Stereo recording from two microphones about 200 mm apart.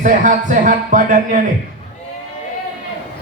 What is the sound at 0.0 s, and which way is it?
Speech, 40° right (ahead or behind).